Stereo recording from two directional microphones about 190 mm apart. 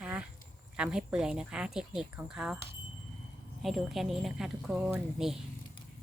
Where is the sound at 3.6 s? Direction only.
Centre (ahead or behind).